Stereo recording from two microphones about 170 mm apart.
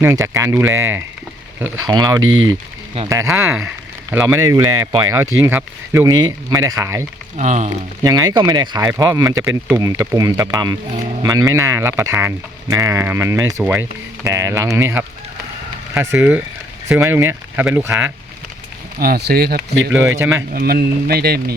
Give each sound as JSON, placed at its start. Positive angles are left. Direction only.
{"t": 0.0, "sound": "speech", "side_deg": -15}
{"t": 7.3, "sound": "speech", "side_deg": -45}
{"t": 8.0, "sound": "speech", "side_deg": -20}
{"t": 18.9, "sound": "a man's voice", "side_deg": -60}
{"t": 20.1, "sound": "speech", "side_deg": -15}
{"t": 20.5, "sound": "a man's voice", "side_deg": -60}